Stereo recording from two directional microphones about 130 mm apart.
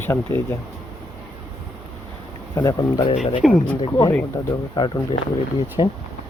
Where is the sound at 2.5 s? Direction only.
30° left (ahead or behind).